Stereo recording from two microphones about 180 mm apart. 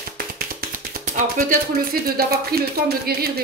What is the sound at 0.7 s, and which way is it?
Speech, 50° right (ahead or behind).